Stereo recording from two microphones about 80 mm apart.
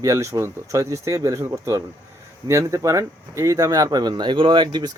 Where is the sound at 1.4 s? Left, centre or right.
Right.